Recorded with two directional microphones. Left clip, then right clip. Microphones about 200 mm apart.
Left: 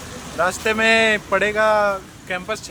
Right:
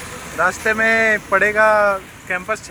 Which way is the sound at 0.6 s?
15° left (ahead or behind).